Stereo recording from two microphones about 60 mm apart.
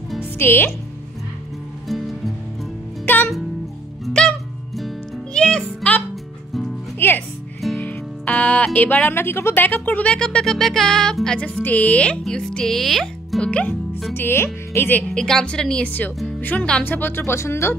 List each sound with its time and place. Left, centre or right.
0.4 s speech: left
1.9 s music: centre
4.1 s music: centre
4.7 s music: centre
5.3 s music: centre
7.0 s music: left
9.0 s speech: left
10.1 s speech: centre
11.3 s speech: centre
13.4 s speech: left
14.1 s speech: left
15.1 s speech: centre
16.3 s speech: left
17.3 s speech: left